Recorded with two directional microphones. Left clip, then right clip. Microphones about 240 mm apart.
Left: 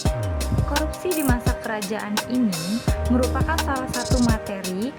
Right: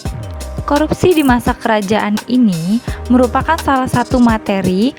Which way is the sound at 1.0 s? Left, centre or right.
Right.